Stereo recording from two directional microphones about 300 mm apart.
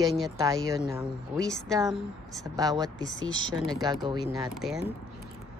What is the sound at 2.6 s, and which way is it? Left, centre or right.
Speech, centre.